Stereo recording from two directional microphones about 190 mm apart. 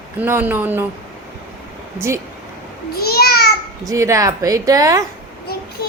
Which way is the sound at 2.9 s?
55° left (ahead or behind).